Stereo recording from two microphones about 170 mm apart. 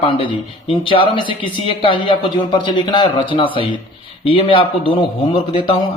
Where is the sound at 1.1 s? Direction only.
30° left (ahead or behind).